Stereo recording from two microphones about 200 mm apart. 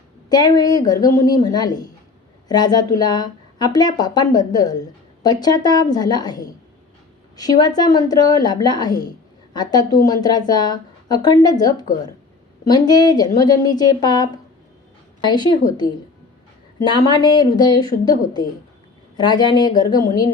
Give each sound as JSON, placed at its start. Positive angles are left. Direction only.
{"t": 0.3, "sound": "a woman's voice", "side_deg": 20}
{"t": 15.3, "sound": "a woman's voice", "side_deg": 20}